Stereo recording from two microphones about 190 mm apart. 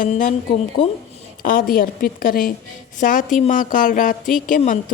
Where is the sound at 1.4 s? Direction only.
45° left (ahead or behind).